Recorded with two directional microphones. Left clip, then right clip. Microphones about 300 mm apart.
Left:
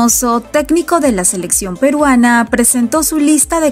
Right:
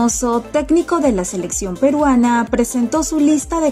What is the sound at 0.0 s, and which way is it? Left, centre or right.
A woman's voice, centre.